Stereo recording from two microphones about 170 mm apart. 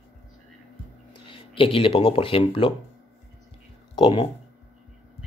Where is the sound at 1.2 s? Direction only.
30° left (ahead or behind).